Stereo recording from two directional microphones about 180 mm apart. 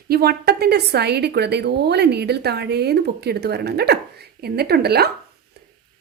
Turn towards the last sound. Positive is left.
turn(degrees=-60)  # may be behind; listen again after turning